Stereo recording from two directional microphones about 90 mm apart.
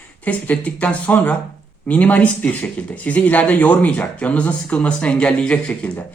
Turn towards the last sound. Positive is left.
turn(degrees=10)  # may be behind; listen again after turning